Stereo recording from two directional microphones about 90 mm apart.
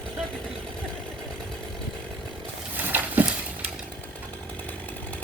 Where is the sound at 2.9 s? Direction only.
20° right (ahead or behind).